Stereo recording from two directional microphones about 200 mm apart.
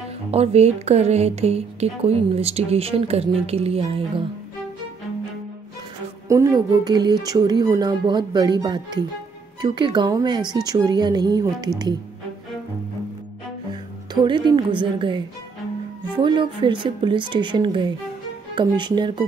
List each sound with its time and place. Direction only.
0.3 s speech: 30° right (ahead or behind)
6.2 s speech: 15° right (ahead or behind)
14.2 s speech: 20° right (ahead or behind)